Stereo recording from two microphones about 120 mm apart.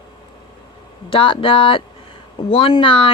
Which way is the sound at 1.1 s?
45° left (ahead or behind).